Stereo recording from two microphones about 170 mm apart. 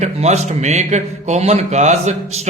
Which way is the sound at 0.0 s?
40° right (ahead or behind).